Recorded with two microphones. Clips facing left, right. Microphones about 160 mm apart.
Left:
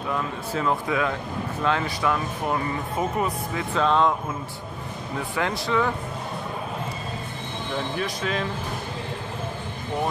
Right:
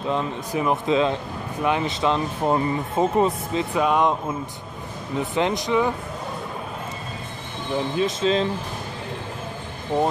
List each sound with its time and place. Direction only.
0.1 s speech: 20° right (ahead or behind)
3.7 s speech: 15° right (ahead or behind)
5.3 s speech: 20° right (ahead or behind)
7.9 s speech: 25° right (ahead or behind)